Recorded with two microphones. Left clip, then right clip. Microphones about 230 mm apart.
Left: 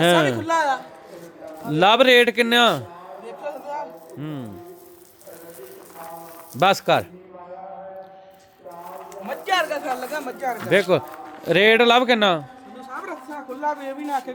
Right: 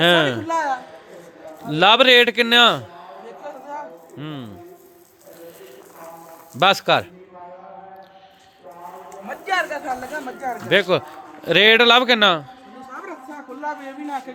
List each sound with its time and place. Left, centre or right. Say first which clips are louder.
0.0 s a man's voice: right 1 dB; centre
0.4 s a man's voice: left 1 dB; centre
3.4 s chatter: left 3 dB; centre
4.2 s a man's voice: even; centre
6.5 s a man's voice: right 1 dB; centre
9.3 s a man's voice: left 1 dB; centre
12.9 s a sound: left 2 dB; centre
13.6 s speech: left 3 dB; centre